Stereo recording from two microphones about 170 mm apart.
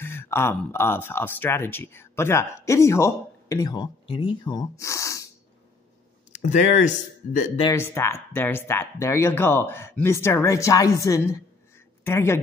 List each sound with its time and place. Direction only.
0.0 s speech: 15° left (ahead or behind)
6.3 s speech: 45° left (ahead or behind)
7.7 s a woman's voice: 15° left (ahead or behind)